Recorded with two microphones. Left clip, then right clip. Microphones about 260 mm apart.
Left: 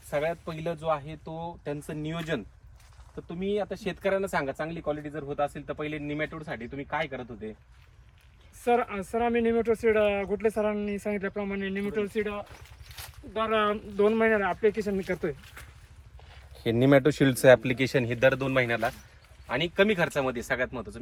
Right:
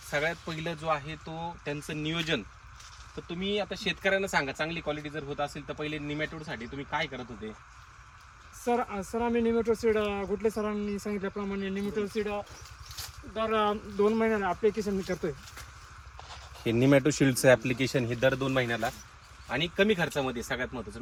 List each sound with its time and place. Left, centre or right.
0.1 s speech: centre
8.6 s speech: centre
16.8 s speech: centre